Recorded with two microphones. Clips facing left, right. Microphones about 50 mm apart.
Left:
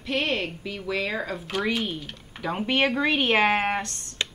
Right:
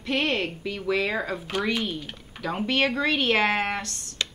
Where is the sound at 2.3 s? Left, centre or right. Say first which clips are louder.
Left 1 dB; centre.